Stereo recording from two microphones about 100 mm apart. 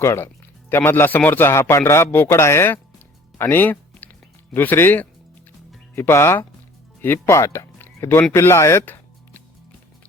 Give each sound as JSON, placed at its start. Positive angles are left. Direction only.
{"t": 0.0, "sound": "speech", "side_deg": 30}
{"t": 3.3, "sound": "a sound", "side_deg": 20}
{"t": 4.5, "sound": "speech", "side_deg": 20}